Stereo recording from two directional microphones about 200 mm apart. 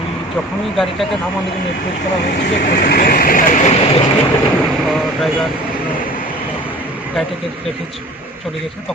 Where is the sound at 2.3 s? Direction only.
55° left (ahead or behind); by 4.1 s 30° left (ahead or behind).